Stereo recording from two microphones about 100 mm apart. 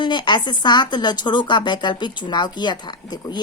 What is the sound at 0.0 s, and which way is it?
A woman's voice, 50° left (ahead or behind).